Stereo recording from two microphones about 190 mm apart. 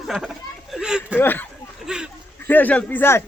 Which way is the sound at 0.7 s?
5° right (ahead or behind).